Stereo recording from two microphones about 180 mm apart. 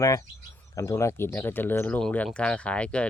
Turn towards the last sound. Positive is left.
turn(degrees=5)  # may be behind; listen again after turning